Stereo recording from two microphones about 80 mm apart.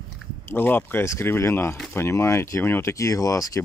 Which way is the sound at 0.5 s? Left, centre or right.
Left.